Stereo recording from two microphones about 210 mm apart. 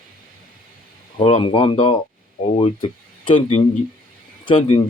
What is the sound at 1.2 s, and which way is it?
Speech, 30° left (ahead or behind).